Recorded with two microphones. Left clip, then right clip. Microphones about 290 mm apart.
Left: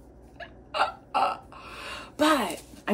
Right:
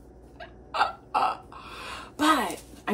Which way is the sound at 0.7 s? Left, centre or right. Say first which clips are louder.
Right 1 dB; centre.